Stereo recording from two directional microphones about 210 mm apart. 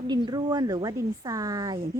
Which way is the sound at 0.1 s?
20° right (ahead or behind).